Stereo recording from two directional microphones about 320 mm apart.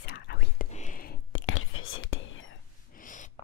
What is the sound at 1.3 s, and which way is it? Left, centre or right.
Whispering, left.